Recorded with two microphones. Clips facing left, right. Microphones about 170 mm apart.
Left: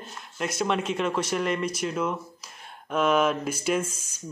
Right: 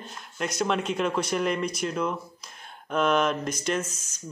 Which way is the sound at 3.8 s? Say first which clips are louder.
Left 2 dB; 30° left (ahead or behind).